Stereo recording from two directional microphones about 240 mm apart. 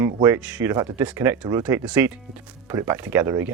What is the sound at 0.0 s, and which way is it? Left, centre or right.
Speech, centre.